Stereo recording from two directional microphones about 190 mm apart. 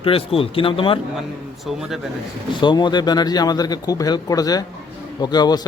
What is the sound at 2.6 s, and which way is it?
Speech, 25° left (ahead or behind).